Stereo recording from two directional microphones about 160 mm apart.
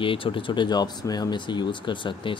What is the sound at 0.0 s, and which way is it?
Speech, 35° left (ahead or behind).